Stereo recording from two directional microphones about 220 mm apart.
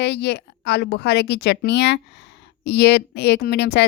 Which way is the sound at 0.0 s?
50° left (ahead or behind).